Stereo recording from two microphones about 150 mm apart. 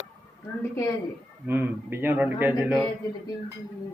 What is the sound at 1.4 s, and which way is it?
A man's voice, 10° right (ahead or behind).